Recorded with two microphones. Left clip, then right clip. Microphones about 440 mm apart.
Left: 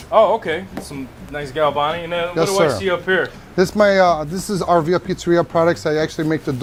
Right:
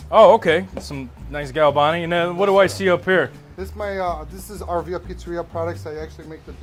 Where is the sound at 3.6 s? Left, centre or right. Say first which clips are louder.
Left 13 dB; left.